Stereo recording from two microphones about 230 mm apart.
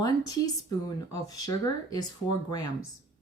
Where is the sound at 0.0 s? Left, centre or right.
Centre.